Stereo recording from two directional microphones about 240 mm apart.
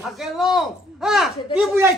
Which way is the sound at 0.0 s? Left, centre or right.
Centre.